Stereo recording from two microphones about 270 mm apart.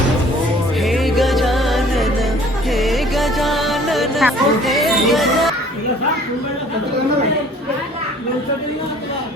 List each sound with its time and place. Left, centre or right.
0.8 s music: centre